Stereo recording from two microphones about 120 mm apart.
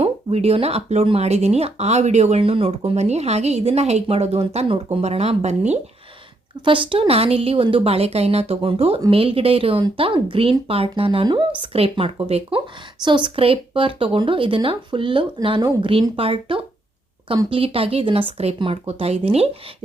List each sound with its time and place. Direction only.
0.0 s speech: 60° right (ahead or behind)
2.4 s speech: 50° right (ahead or behind); by 5.8 s 70° right (ahead or behind)
6.7 s a woman's voice: 45° right (ahead or behind)